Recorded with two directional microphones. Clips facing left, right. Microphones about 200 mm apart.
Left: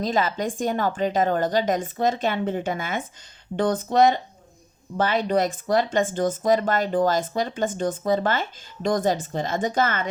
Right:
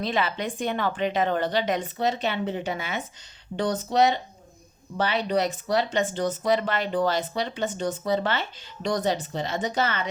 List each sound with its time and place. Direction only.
0.0 s speech: 40° left (ahead or behind)